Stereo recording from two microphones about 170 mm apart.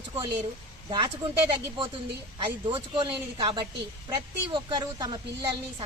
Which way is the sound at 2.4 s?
30° right (ahead or behind).